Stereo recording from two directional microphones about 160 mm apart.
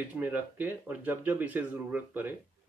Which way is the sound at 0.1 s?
10° right (ahead or behind).